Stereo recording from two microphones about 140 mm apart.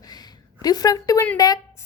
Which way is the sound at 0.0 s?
30° left (ahead or behind).